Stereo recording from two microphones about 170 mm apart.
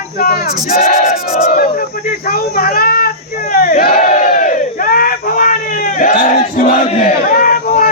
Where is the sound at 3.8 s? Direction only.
50° left (ahead or behind).